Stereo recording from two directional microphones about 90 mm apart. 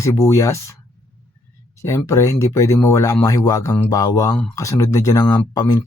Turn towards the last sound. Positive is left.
turn(degrees=45)  # may be behind; listen again after turning